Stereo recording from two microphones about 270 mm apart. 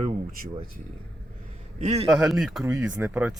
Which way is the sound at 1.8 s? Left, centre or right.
Right.